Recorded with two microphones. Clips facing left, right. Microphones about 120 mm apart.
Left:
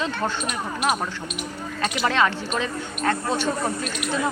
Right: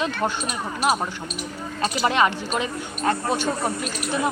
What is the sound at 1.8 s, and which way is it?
Speech, 35° right (ahead or behind).